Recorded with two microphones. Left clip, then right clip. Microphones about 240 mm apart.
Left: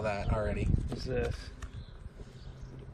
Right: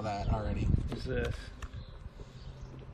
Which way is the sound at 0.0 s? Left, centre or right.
Centre.